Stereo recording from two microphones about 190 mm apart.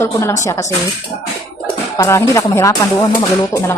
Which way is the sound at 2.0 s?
15° left (ahead or behind).